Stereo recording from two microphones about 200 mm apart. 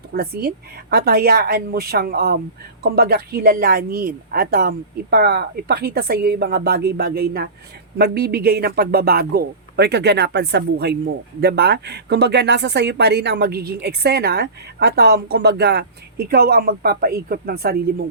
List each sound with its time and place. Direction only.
0.1 s speech: 50° right (ahead or behind)